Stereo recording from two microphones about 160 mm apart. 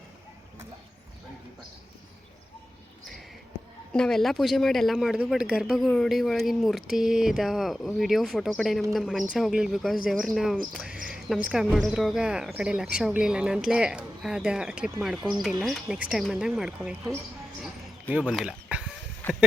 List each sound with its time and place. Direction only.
3.9 s a woman's voice: 5° left (ahead or behind)
10.7 s cricket: 5° right (ahead or behind)
11.4 s a woman's voice: centre (ahead or behind)
18.1 s speech: 5° right (ahead or behind)
19.2 s speech: 10° left (ahead or behind)